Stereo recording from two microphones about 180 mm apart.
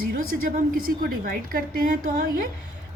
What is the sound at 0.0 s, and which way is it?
A woman's voice, 55° right (ahead or behind).